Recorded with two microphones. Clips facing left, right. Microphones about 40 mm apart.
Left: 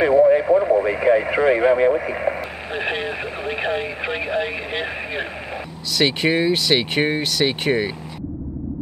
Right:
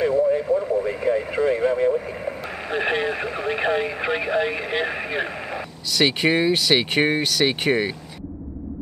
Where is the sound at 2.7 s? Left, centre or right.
Centre.